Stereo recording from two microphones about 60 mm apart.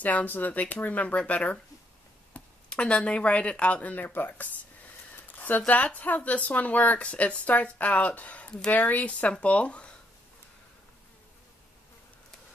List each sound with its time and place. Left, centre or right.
0.0 s speech: left
5.1 s a sound: left
5.7 s speech: left